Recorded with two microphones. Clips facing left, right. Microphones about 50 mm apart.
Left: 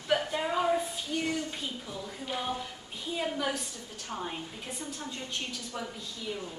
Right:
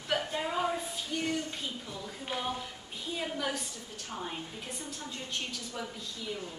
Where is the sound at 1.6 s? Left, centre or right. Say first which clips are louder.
Left 1 dB; centre.